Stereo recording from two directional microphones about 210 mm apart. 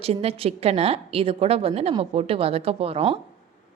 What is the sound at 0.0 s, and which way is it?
A woman's voice, 30° right (ahead or behind).